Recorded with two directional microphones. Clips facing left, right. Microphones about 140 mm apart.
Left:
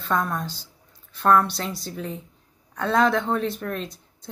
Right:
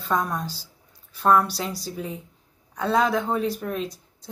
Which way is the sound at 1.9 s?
10° right (ahead or behind).